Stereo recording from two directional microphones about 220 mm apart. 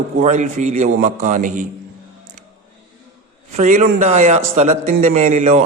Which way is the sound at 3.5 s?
35° right (ahead or behind).